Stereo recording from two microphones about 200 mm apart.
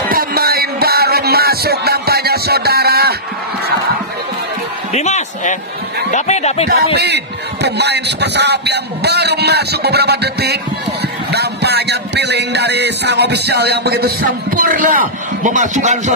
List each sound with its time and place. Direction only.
0.1 s music: 50° right (ahead or behind)
4.9 s a sound: 35° left (ahead or behind)
6.1 s speech: 35° left (ahead or behind)
7.6 s music: 55° right (ahead or behind); by 16.0 s 40° right (ahead or behind)